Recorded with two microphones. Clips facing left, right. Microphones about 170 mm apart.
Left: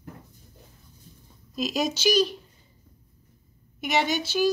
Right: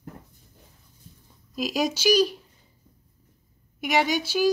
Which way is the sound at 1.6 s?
10° right (ahead or behind).